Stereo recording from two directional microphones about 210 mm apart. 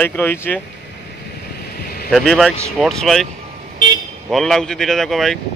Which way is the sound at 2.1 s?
Centre (ahead or behind).